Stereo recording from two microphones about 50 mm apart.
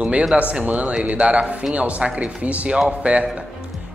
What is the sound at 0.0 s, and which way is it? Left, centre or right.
Speech, right.